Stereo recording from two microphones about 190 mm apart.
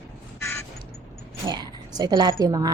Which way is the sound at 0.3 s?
15° left (ahead or behind).